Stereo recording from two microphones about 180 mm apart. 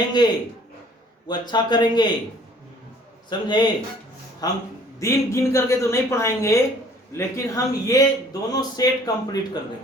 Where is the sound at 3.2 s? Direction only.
25° left (ahead or behind).